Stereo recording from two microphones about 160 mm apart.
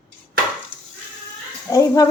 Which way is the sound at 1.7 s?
20° left (ahead or behind).